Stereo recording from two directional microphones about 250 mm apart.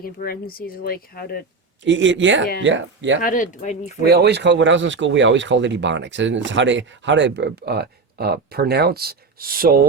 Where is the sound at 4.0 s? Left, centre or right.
Right.